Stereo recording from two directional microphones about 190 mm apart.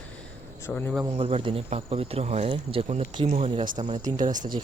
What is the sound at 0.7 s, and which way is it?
Speech, 10° left (ahead or behind).